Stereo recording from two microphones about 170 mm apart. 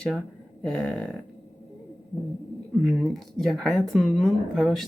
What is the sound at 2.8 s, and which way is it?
Speech, centre (ahead or behind).